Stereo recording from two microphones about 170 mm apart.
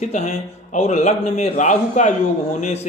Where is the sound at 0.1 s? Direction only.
40° left (ahead or behind).